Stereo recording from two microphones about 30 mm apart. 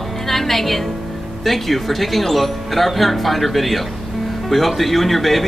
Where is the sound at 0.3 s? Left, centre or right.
Centre.